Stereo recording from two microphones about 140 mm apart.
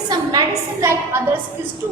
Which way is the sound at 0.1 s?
30° right (ahead or behind).